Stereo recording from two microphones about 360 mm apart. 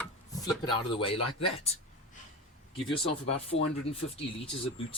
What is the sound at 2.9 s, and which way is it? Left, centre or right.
Speech, centre.